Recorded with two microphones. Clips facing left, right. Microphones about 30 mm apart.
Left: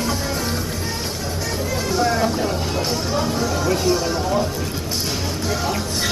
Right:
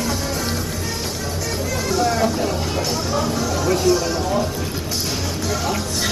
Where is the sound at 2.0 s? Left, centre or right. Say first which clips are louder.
Even; centre.